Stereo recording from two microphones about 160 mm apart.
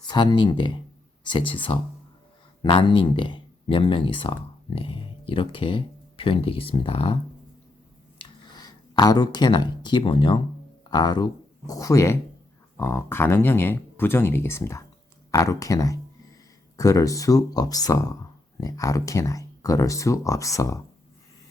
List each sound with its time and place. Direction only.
0.1 s speech: 25° left (ahead or behind)
8.2 s speech: 25° left (ahead or behind)